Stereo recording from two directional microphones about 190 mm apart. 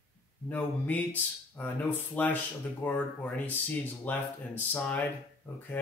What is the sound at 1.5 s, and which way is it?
Speech, 10° left (ahead or behind).